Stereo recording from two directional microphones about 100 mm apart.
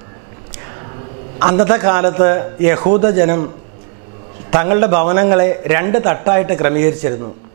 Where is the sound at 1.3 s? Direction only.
15° right (ahead or behind).